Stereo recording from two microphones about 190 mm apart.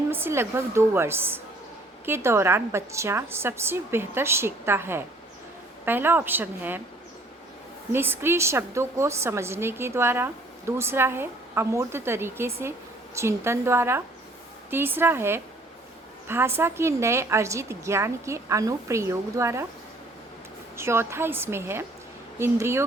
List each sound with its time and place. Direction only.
0.1 s a woman's voice: 10° right (ahead or behind)
7.9 s a woman's voice: 10° right (ahead or behind)
20.7 s a woman's voice: 15° right (ahead or behind)